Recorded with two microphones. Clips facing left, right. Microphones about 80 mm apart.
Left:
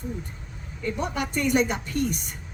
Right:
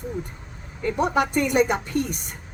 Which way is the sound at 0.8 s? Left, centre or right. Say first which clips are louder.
Right 7 dB; right.